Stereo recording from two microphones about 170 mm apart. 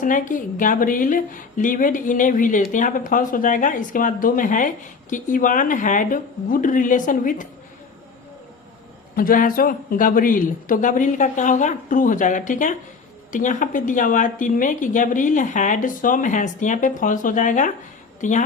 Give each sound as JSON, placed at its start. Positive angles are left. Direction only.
{"t": 0.0, "sound": "speech", "side_deg": 50}
{"t": 9.1, "sound": "a woman's voice", "side_deg": 55}